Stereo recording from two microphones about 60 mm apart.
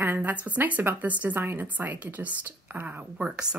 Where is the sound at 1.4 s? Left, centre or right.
Right.